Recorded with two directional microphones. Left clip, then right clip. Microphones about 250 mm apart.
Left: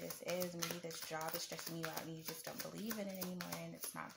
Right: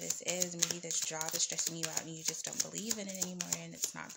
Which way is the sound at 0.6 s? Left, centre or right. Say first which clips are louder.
Right 9 dB; right.